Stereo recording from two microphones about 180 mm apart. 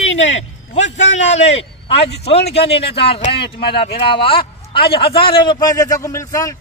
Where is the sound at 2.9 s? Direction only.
30° left (ahead or behind).